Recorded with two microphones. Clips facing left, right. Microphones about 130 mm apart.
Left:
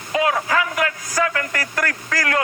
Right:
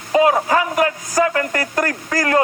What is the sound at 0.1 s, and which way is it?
A man's voice, 30° right (ahead or behind).